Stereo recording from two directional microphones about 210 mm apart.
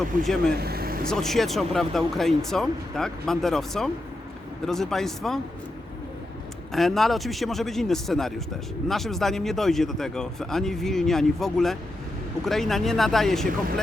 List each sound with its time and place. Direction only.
0.2 s speech: centre (ahead or behind)
0.6 s vehicle: 45° right (ahead or behind)
1.0 s speech: centre (ahead or behind)
6.7 s speech: centre (ahead or behind)